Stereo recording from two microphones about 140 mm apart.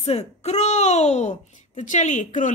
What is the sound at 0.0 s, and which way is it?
A child's voice, 50° left (ahead or behind).